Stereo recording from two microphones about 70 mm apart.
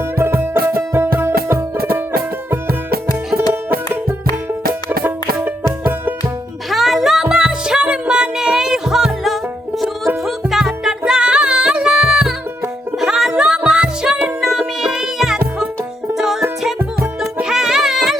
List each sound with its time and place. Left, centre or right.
0.0 s music: right
1.7 s music: right
4.7 s music: right
6.7 s music: centre
17.4 s music: centre